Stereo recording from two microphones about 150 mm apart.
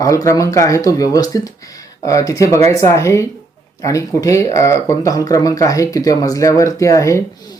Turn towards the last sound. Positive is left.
turn(degrees=20)  # may be behind; listen again after turning